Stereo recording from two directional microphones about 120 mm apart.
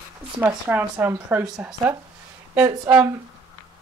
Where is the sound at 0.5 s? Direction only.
15° right (ahead or behind).